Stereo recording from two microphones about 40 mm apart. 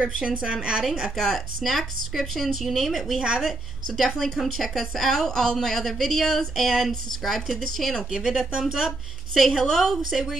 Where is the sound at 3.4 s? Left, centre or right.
Centre.